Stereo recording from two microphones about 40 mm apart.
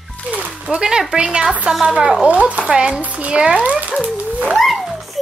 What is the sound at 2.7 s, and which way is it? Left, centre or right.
Speech, right.